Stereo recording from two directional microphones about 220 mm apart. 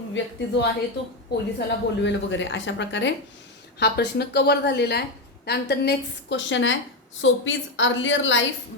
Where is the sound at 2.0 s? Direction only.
55° left (ahead or behind).